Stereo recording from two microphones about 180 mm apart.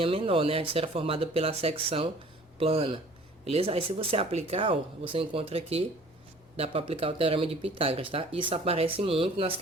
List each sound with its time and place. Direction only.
0.0 s speech: 30° right (ahead or behind)